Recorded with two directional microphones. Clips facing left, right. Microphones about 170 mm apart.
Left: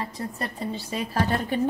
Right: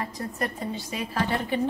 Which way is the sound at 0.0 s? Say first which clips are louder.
Right 1 dB; 30° left (ahead or behind).